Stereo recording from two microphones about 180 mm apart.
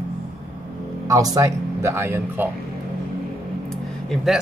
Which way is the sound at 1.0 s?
20° right (ahead or behind).